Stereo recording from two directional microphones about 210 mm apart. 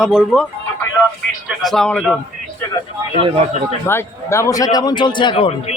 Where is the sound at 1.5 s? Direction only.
Centre (ahead or behind).